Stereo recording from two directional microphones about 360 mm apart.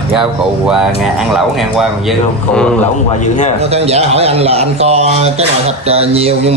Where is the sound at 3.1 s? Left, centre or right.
Centre.